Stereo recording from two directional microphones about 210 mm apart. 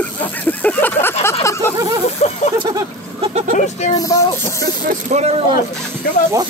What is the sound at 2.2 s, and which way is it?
Speech, 30° left (ahead or behind).